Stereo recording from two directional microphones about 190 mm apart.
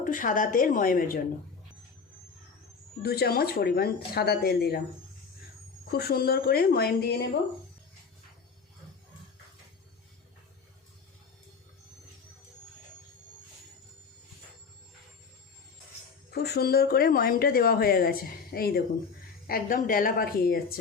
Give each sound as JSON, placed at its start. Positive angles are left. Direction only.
{"t": 0.0, "sound": "speech", "side_deg": 45}
{"t": 3.0, "sound": "speech", "side_deg": 55}
{"t": 5.9, "sound": "speech", "side_deg": 55}
{"t": 16.3, "sound": "speech", "side_deg": 55}